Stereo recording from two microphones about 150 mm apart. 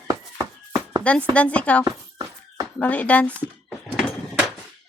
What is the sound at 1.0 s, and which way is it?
Speech, 10° left (ahead or behind).